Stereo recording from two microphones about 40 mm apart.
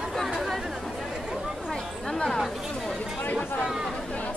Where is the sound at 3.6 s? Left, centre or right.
Centre.